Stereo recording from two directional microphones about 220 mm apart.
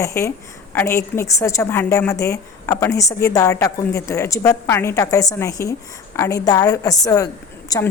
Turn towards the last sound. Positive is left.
turn(degrees=15)  # may be behind; listen again after turning